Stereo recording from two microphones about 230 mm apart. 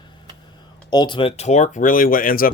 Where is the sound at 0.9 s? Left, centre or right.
Centre; by 2.4 s left.